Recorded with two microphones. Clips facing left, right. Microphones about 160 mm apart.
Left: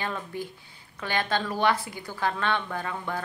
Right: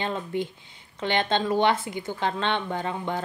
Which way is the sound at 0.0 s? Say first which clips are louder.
Right 5 dB; 25° right (ahead or behind).